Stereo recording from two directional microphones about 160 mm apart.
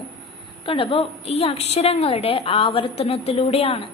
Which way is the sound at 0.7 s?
35° left (ahead or behind).